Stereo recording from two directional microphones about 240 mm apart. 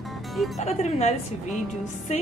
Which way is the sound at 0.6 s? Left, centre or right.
Left.